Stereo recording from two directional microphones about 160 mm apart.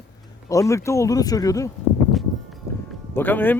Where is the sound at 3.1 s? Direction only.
10° left (ahead or behind).